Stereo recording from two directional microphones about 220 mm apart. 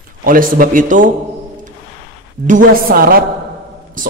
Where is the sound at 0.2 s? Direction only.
40° right (ahead or behind).